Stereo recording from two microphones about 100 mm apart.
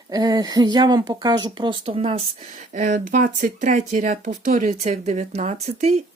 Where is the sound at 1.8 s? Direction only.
75° right (ahead or behind).